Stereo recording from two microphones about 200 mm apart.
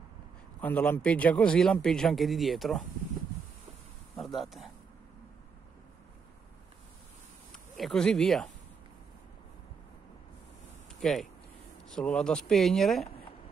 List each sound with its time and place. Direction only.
0.6 s a man's voice: 5° left (ahead or behind)
4.2 s speech: centre (ahead or behind)
7.5 s speech: centre (ahead or behind)
11.0 s a man's voice: centre (ahead or behind)